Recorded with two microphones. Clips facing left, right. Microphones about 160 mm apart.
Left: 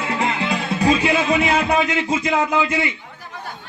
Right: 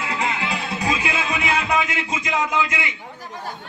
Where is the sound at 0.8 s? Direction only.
30° left (ahead or behind).